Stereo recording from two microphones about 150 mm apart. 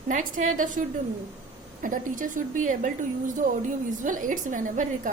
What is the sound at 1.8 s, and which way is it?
A woman's voice, 60° right (ahead or behind).